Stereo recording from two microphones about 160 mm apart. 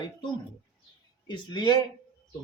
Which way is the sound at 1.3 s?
30° left (ahead or behind).